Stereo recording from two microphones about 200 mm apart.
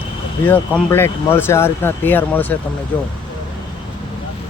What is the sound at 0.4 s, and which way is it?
Speech, 10° left (ahead or behind).